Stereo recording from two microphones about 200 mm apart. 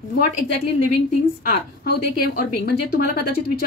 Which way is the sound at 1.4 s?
50° left (ahead or behind).